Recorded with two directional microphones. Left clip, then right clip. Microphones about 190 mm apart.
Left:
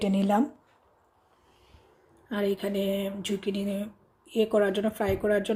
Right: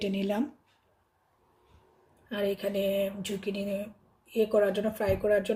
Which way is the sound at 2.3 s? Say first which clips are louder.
Left 1 dB; 25° left (ahead or behind).